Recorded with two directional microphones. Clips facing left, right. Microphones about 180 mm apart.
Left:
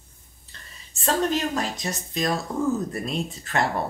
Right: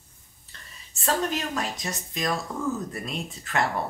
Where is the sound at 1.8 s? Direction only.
30° left (ahead or behind).